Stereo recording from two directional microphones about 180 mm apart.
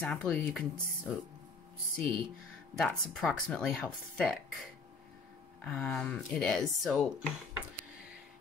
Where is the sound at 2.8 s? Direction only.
5° left (ahead or behind).